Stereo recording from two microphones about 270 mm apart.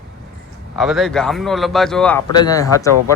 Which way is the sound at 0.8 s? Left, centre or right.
Centre.